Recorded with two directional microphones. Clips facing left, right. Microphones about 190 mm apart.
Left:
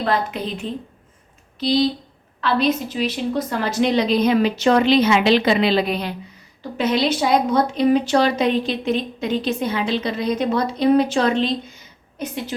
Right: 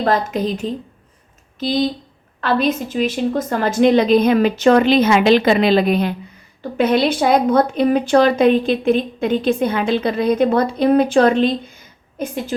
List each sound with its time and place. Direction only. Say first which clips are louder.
0.0 s speech: right 4 dB; 45° right (ahead or behind)